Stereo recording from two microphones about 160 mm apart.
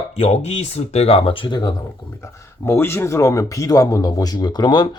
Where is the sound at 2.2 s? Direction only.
15° left (ahead or behind).